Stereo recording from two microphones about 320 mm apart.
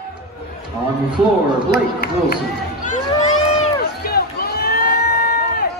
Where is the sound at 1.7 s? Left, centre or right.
Left.